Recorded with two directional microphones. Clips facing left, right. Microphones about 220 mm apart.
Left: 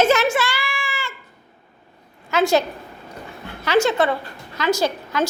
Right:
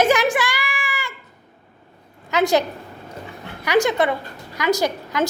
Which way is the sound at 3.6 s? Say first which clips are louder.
Even; 15° right (ahead or behind).